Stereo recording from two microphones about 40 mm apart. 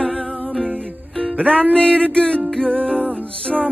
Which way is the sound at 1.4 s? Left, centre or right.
Left.